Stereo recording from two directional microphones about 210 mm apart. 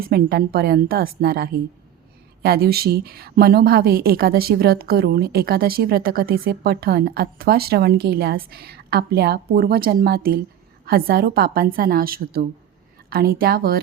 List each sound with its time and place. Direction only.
0.0 s a woman's voice: 45° right (ahead or behind)